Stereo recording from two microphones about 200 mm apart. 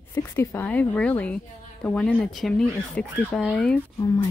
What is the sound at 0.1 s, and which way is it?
Speech, 10° left (ahead or behind).